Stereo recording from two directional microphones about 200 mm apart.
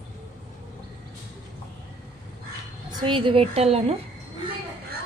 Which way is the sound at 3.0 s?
25° right (ahead or behind).